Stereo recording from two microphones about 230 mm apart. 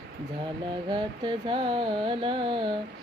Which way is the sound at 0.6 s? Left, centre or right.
Right.